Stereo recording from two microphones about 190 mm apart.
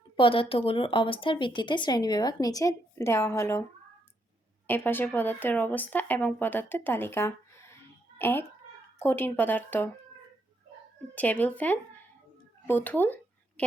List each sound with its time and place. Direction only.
0.2 s speech: 30° left (ahead or behind); by 9.9 s 10° left (ahead or behind)
11.1 s speech: 10° left (ahead or behind)